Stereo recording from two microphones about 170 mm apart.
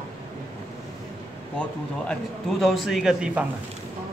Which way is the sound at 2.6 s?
Centre (ahead or behind).